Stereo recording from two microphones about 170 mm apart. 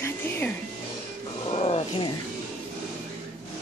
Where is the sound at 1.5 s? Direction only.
40° left (ahead or behind).